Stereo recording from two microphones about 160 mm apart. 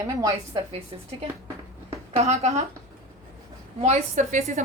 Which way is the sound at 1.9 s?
40° right (ahead or behind).